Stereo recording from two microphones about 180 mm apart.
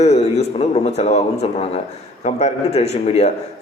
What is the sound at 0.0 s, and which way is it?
A man's voice, 40° left (ahead or behind).